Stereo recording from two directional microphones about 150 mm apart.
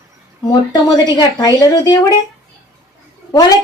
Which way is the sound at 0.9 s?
25° left (ahead or behind).